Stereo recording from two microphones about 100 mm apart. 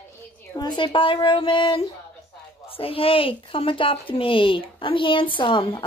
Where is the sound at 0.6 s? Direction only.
50° left (ahead or behind).